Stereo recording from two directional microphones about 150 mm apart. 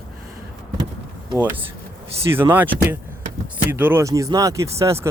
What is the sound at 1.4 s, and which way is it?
Speech, 15° right (ahead or behind).